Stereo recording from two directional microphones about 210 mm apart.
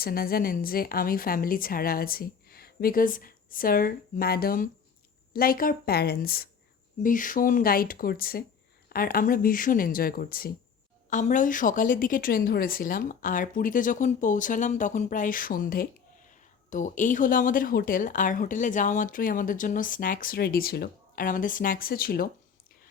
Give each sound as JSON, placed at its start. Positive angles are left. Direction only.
{"t": 0.0, "sound": "a woman's voice", "side_deg": 45}